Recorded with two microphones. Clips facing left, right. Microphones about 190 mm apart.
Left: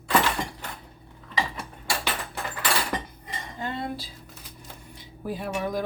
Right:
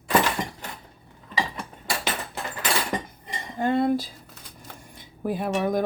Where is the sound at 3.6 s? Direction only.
50° right (ahead or behind).